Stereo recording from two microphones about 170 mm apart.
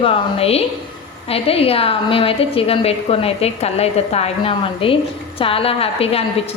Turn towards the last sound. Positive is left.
turn(degrees=35)  # may be behind; listen again after turning